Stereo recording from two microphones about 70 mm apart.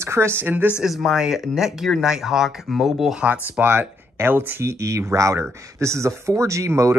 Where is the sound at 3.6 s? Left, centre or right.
Right.